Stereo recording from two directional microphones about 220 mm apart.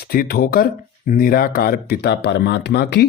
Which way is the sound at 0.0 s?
45° left (ahead or behind).